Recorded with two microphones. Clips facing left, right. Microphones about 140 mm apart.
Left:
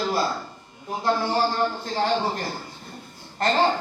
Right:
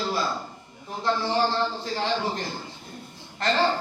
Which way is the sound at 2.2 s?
45° left (ahead or behind).